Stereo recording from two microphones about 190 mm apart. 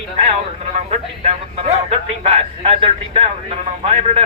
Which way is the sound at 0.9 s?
35° right (ahead or behind).